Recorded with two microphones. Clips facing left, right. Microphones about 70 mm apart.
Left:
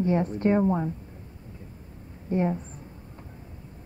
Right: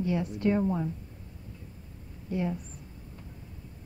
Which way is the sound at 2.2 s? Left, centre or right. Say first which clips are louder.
Left 6 dB; left.